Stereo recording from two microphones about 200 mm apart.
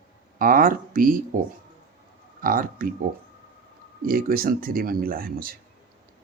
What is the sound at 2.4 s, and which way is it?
Speech, 45° right (ahead or behind).